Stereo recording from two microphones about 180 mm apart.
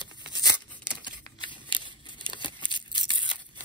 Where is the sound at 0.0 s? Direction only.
25° left (ahead or behind).